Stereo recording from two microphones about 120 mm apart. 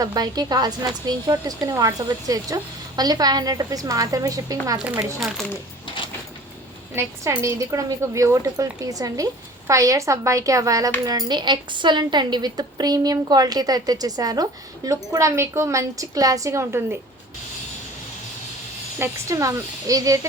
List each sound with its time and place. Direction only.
0.0 s speech: 35° right (ahead or behind)
6.9 s a woman's voice: 20° right (ahead or behind)
18.9 s a woman's voice: 25° right (ahead or behind)